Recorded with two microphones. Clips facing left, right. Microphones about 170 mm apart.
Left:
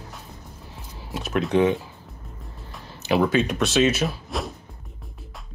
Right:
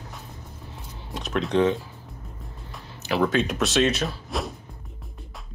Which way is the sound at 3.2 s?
Centre (ahead or behind).